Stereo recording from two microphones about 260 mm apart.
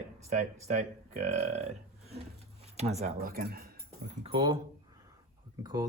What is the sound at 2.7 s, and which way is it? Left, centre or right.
Speech, right.